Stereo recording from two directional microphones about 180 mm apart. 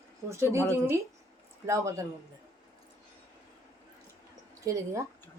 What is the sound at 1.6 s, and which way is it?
Speech, 15° right (ahead or behind).